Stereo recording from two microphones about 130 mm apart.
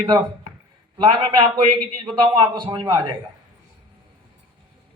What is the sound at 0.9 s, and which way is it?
Speech, 40° right (ahead or behind).